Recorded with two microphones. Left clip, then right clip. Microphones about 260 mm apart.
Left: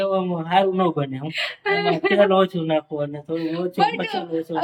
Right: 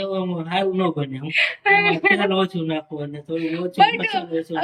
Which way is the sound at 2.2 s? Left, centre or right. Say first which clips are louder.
Left 5 dB; centre.